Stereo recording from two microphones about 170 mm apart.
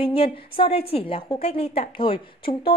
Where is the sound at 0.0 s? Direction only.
30° left (ahead or behind).